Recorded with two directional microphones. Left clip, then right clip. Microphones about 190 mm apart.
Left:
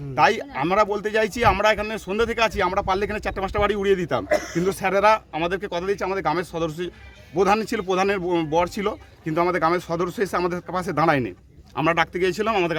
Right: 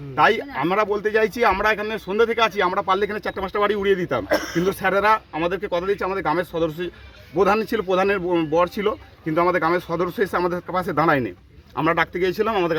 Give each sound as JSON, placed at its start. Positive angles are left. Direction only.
{"t": 0.2, "sound": "speech", "side_deg": 25}
{"t": 4.3, "sound": "speech", "side_deg": -35}
{"t": 4.9, "sound": "speech", "side_deg": 20}